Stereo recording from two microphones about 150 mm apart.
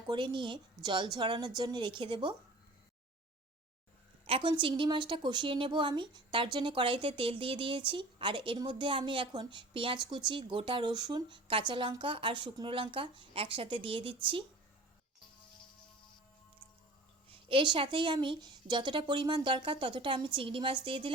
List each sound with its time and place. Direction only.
0.1 s a woman's voice: 30° right (ahead or behind)
4.3 s a woman's voice: 35° right (ahead or behind)
17.2 s a woman's voice: 35° right (ahead or behind)